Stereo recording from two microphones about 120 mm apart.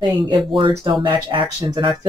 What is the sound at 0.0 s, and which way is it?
Speech, 45° right (ahead or behind).